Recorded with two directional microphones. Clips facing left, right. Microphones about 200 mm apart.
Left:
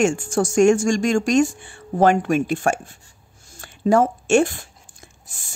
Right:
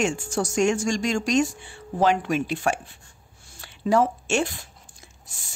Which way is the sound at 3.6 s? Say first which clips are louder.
Left 4 dB; 50° left (ahead or behind).